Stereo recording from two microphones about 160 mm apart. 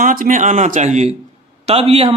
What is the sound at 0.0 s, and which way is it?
A man's voice, 55° right (ahead or behind).